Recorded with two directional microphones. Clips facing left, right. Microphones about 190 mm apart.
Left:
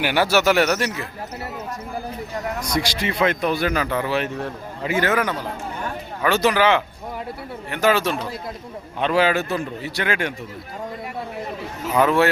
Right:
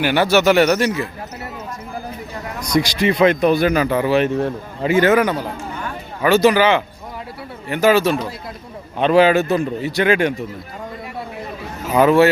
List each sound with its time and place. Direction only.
0.0 s a man's voice: 10° left (ahead or behind)
2.7 s speech: 15° right (ahead or behind)
4.4 s a man's voice: 30° right (ahead or behind)
6.2 s a man's voice: 5° right (ahead or behind)
9.0 s a man's voice: 20° right (ahead or behind)
11.9 s a man's voice: 5° right (ahead or behind)